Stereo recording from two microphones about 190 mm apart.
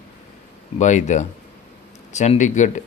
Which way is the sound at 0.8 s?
40° left (ahead or behind).